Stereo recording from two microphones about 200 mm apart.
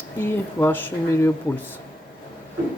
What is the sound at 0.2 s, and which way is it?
Speech, 10° left (ahead or behind).